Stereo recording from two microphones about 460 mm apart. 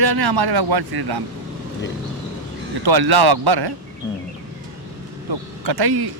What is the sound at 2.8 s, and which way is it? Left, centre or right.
Speech, right.